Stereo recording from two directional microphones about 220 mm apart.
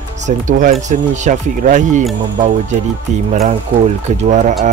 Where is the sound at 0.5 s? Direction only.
35° right (ahead or behind).